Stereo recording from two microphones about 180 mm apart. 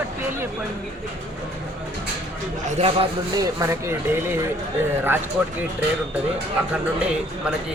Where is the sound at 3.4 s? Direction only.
15° right (ahead or behind).